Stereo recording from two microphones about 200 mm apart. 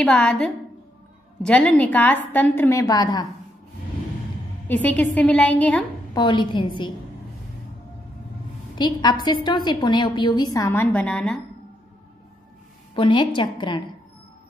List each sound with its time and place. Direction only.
0.0 s a woman's voice: 5° left (ahead or behind)
4.6 s a woman's voice: 10° left (ahead or behind)
6.1 s a woman's voice: 20° left (ahead or behind)
8.7 s a woman's voice: 20° left (ahead or behind)
12.9 s a woman's voice: 25° left (ahead or behind)